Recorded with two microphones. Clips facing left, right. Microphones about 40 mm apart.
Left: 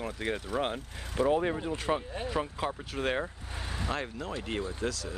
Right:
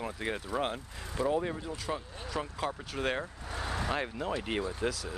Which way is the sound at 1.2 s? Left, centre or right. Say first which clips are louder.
Left 4 dB; left.